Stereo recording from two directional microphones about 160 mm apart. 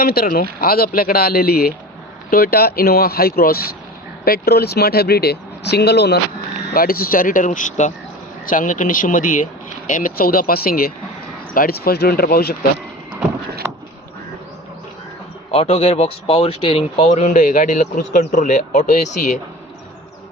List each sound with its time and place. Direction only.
0.0 s speech: 65° left (ahead or behind); by 6.1 s 90° left
6.7 s speech: 65° left (ahead or behind)
15.5 s speech: 40° left (ahead or behind)